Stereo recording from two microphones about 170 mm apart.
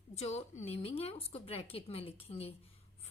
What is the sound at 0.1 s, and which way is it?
A woman's voice, 40° left (ahead or behind).